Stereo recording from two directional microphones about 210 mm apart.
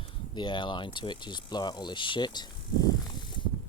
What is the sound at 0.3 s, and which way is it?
Speech, 20° left (ahead or behind).